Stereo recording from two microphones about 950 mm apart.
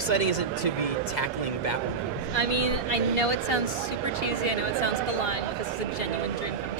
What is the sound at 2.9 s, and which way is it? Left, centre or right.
Speech, left.